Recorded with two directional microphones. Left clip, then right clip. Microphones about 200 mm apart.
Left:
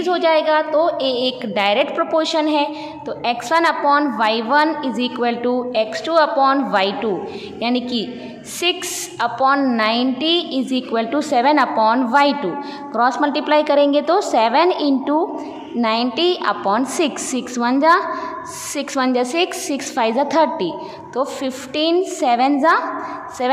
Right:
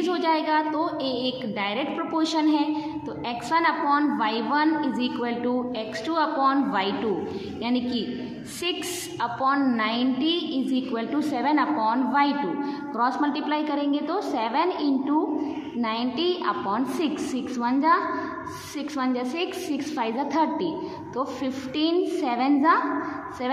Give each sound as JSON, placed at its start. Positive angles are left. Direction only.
{"t": 0.0, "sound": "a woman's voice", "side_deg": 20}